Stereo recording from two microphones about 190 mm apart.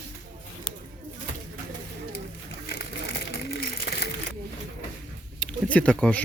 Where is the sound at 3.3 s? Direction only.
55° left (ahead or behind).